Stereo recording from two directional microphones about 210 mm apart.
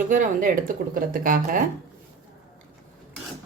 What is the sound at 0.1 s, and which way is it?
A woman's voice, 40° right (ahead or behind).